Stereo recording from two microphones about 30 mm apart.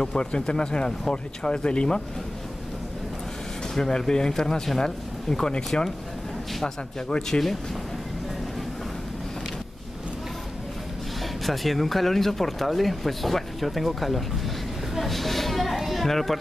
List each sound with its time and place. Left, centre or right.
0.0 s speech: left
3.7 s speech: centre
5.7 s speech: left
7.1 s speech: centre
11.4 s speech: centre